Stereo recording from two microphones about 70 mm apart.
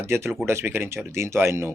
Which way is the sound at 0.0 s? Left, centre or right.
Right.